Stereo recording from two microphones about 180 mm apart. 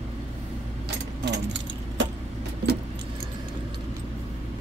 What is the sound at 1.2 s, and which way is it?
Keys jangling, 80° right.